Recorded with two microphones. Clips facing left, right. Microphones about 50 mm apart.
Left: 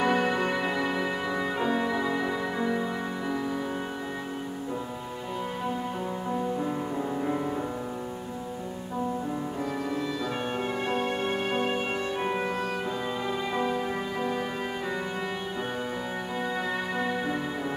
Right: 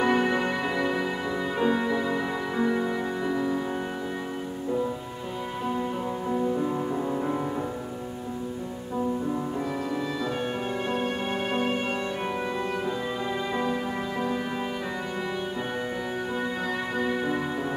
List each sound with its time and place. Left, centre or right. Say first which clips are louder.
0.0 s music: right 1 dB; centre
6.3 s music: right 4 dB; centre
11.0 s music: even; centre
17.0 s music: right 4 dB; centre